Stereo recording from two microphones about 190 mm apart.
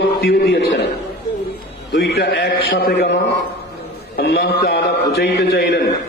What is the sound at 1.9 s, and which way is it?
A man's voice, 60° left (ahead or behind).